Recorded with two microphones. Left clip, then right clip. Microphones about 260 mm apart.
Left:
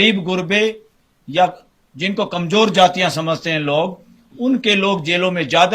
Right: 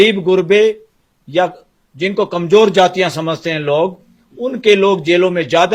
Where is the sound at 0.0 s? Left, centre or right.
Right.